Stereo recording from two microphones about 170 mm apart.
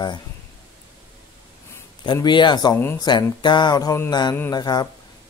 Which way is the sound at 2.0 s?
30° left (ahead or behind).